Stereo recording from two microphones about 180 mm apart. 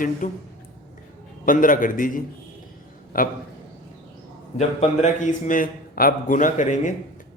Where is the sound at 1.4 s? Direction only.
50° left (ahead or behind).